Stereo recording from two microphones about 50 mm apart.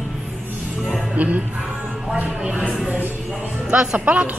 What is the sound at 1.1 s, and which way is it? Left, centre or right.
Music, right.